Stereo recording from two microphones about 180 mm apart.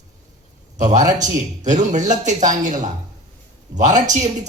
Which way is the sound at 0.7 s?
45° right (ahead or behind).